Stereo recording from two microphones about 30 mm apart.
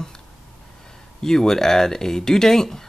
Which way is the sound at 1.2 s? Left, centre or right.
Centre.